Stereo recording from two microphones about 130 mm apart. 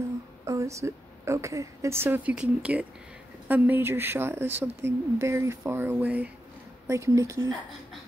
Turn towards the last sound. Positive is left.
turn(degrees=-25)  # may be behind; listen again after turning